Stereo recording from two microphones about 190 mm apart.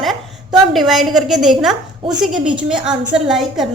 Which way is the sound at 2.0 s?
30° right (ahead or behind).